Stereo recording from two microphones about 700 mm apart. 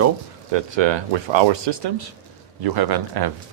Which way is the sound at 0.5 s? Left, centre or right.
Right.